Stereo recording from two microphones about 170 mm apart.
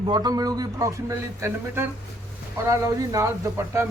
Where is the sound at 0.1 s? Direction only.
25° right (ahead or behind).